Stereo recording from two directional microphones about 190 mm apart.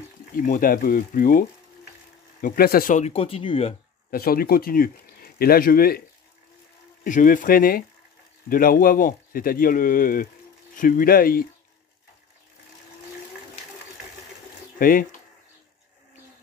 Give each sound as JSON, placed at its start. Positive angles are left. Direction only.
{"t": 0.4, "sound": "speech", "side_deg": 45}
{"t": 2.4, "sound": "speech", "side_deg": 50}
{"t": 4.1, "sound": "speech", "side_deg": 50}
{"t": 7.1, "sound": "speech", "side_deg": 45}
{"t": 14.8, "sound": "speech", "side_deg": 45}